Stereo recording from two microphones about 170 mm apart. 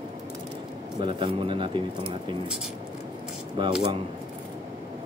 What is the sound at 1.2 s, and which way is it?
Speech, 30° right (ahead or behind).